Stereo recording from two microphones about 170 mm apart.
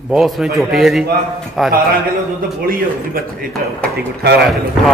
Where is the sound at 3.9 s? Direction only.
70° right (ahead or behind).